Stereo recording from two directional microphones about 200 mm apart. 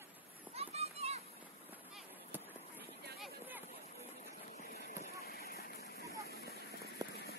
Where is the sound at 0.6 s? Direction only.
30° right (ahead or behind).